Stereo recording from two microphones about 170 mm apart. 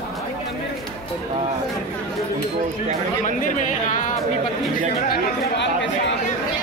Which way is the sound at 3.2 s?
50° left (ahead or behind).